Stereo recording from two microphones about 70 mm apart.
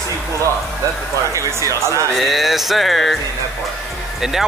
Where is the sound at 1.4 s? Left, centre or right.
Right.